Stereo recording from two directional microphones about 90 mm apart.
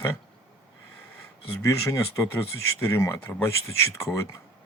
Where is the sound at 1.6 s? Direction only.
35° left (ahead or behind).